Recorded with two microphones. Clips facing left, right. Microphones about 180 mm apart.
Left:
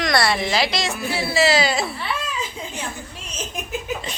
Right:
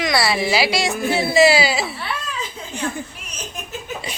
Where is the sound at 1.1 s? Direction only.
20° right (ahead or behind); by 2.1 s centre (ahead or behind).